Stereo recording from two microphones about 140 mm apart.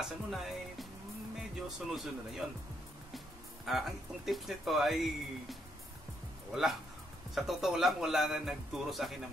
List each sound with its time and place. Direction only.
0.0 s music: centre (ahead or behind)
1.5 s speech: 5° right (ahead or behind)
3.6 s speech: centre (ahead or behind)